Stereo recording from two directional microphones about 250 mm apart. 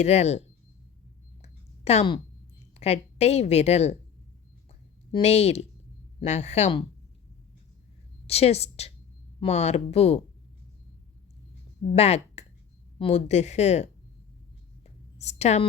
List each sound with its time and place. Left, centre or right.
0.0 s a woman's voice: left
1.4 s a sound: left
2.7 s a woman's voice: left
5.1 s a woman's voice: left
8.3 s a woman's voice: left
11.8 s a woman's voice: left
14.8 s a sound: left